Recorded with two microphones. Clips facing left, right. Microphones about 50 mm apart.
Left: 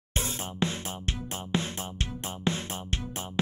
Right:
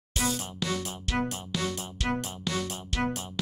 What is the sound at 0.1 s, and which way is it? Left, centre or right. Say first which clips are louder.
Music: right 3 dB; left.